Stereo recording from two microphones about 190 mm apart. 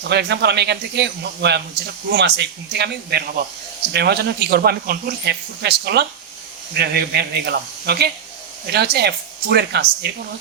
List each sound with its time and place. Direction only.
0.1 s speech: 60° right (ahead or behind)